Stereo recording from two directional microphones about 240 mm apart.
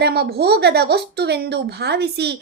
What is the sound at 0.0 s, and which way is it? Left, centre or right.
A woman's voice, right.